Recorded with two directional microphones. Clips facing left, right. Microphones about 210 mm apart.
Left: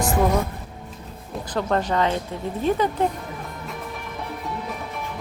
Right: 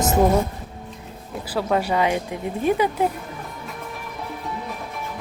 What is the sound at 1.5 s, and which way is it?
Speech, 10° right (ahead or behind).